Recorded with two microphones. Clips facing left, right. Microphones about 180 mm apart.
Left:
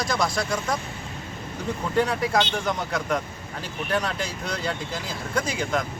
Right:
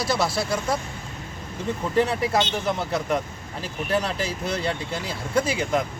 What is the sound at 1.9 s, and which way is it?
Speech, 5° right (ahead or behind).